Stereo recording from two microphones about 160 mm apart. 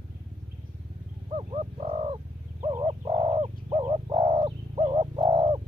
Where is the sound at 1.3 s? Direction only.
40° right (ahead or behind).